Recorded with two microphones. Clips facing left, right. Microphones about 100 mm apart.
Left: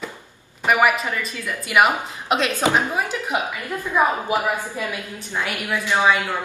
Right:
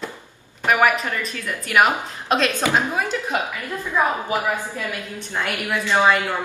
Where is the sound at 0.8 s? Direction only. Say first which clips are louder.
Even; 5° left (ahead or behind).